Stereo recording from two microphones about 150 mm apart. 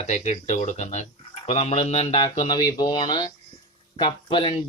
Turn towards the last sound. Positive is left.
turn(degrees=35)  # may be behind; listen again after turning